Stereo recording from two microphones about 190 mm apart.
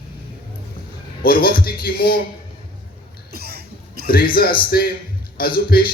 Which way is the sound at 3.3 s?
55° right (ahead or behind).